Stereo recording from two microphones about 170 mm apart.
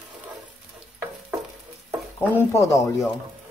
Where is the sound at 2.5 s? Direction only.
20° left (ahead or behind).